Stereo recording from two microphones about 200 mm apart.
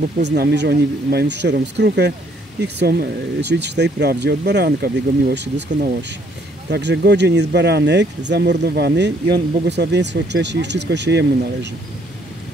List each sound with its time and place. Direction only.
0.2 s speech: 55° right (ahead or behind)
6.7 s speech: 55° right (ahead or behind)